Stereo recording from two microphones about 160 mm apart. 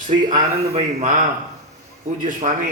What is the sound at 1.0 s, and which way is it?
Speech, 55° right (ahead or behind).